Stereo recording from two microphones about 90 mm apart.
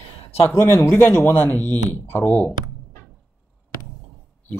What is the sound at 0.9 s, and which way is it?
Speech, 25° left (ahead or behind).